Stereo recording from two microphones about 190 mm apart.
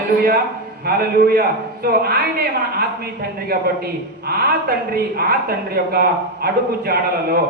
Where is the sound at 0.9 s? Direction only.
55° right (ahead or behind).